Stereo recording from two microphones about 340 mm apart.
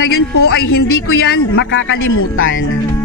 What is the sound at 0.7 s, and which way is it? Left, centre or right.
Speech, left.